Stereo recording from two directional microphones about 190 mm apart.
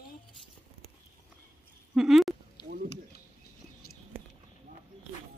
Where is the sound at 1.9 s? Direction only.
Centre (ahead or behind).